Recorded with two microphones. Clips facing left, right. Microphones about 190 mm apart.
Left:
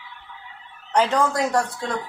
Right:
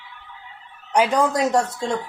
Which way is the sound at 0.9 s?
15° right (ahead or behind).